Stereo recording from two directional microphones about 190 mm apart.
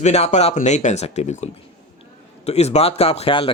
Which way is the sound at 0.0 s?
35° left (ahead or behind).